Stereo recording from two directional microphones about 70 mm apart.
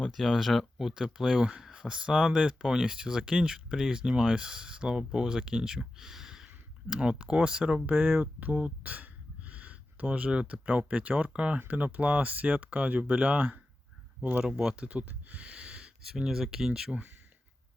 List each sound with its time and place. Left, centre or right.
0.1 s speech: centre
7.9 s speech: right
14.4 s speech: centre
16.0 s speech: centre